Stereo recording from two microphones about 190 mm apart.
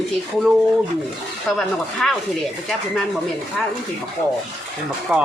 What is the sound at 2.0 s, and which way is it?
Speech, 5° left (ahead or behind).